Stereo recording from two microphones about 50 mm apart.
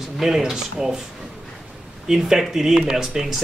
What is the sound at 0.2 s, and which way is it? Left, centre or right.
Speech, centre.